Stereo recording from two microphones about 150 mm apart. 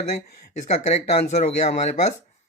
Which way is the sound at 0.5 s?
50° left (ahead or behind).